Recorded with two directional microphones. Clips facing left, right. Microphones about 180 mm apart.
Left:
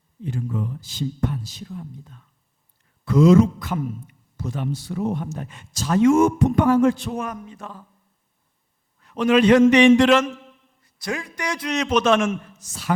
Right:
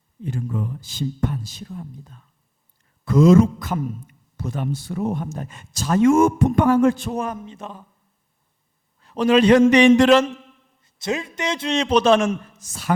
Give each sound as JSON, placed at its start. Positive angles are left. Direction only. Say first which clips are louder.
{"t": 0.2, "sound": "speech", "louder": "even", "side_deg": -45}
{"t": 7.2, "sound": "a man's voice", "louder": "right 3 dB", "side_deg": -25}
{"t": 9.0, "sound": "a man's voice", "louder": "right 1 dB", "side_deg": -35}
{"t": 10.8, "sound": "a man's voice", "louder": "right 4 dB", "side_deg": -25}